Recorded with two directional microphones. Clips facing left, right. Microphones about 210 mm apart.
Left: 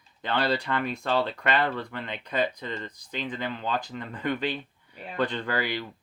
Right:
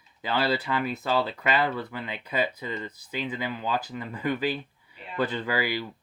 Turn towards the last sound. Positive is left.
turn(degrees=-5)  # may be behind; listen again after turning